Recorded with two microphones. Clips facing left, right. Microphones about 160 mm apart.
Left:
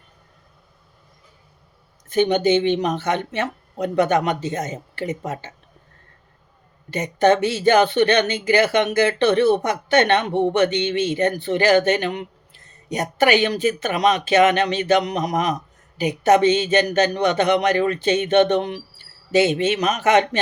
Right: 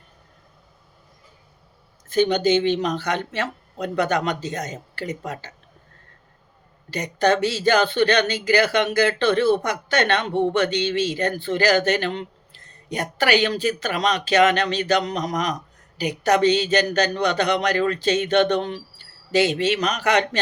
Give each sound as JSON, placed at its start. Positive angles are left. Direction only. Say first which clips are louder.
{"t": 2.0, "sound": "speech", "louder": "left 1 dB", "side_deg": 20}
{"t": 6.9, "sound": "speech", "louder": "left 3 dB", "side_deg": 20}